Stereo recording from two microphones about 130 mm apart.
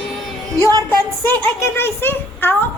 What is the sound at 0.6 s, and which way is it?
Music, 25° right (ahead or behind).